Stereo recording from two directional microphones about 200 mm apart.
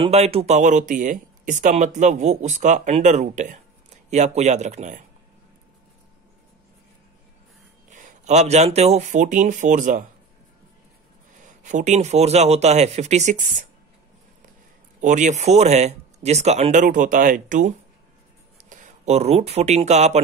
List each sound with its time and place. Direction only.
0.0 s speech: 30° right (ahead or behind)
7.9 s speech: 35° right (ahead or behind)
11.3 s speech: 40° right (ahead or behind)
15.0 s speech: 40° right (ahead or behind)